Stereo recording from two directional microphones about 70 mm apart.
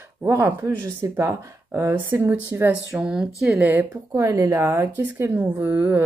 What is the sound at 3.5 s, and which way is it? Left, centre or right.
Speech, right.